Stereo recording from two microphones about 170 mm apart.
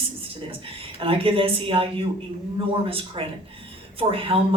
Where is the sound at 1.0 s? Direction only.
30° right (ahead or behind).